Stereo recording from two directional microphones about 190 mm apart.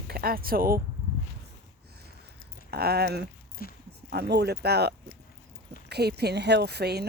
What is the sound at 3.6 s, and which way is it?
Speech, 50° left (ahead or behind).